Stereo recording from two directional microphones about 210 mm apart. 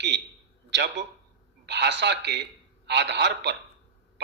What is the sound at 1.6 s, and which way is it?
A man's voice, 55° right (ahead or behind).